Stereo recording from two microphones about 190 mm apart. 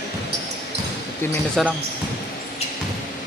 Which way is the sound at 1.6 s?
Centre (ahead or behind).